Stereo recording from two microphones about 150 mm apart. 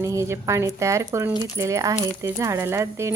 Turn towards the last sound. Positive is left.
turn(degrees=-15)  # may be behind; listen again after turning